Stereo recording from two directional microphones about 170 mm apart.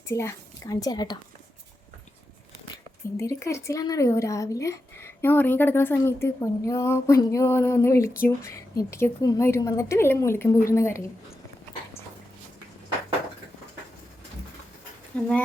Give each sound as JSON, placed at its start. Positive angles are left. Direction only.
{"t": 0.1, "sound": "a woman's voice", "side_deg": 15}
{"t": 3.2, "sound": "speech", "side_deg": 15}